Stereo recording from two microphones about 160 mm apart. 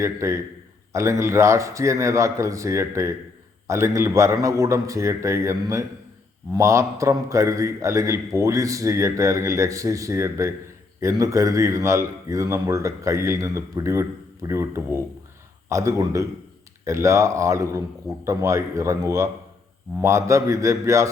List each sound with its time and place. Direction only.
0.0 s a man's voice: 20° right (ahead or behind)